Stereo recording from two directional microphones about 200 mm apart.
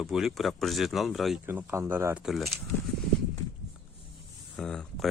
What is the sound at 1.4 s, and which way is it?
Speech, 10° right (ahead or behind).